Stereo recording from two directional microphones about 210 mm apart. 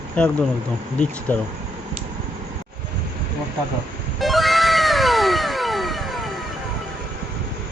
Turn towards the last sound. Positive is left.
turn(degrees=0)  # may be behind; listen again after turning